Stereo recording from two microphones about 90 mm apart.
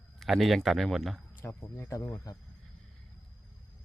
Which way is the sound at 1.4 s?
20° left (ahead or behind).